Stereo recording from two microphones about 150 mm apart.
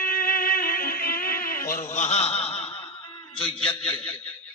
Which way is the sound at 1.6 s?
20° left (ahead or behind).